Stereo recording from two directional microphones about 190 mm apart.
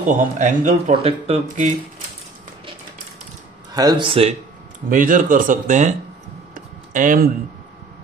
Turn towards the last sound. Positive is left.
turn(degrees=-45)  # may be behind; listen again after turning